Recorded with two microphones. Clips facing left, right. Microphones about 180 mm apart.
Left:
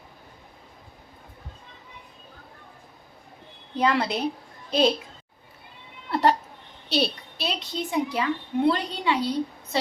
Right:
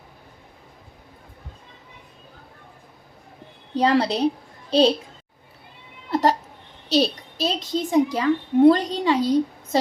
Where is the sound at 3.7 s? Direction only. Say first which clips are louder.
Right 4 dB; 35° right (ahead or behind).